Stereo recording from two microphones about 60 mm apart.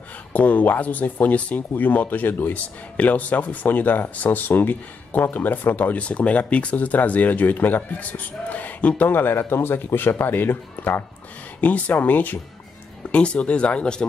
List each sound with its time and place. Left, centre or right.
0.3 s speech: left